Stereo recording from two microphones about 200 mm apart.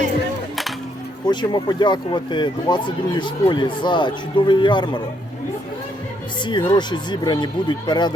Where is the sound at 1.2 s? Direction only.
20° left (ahead or behind).